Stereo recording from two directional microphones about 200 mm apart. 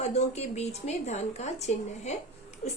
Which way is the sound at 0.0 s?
35° left (ahead or behind).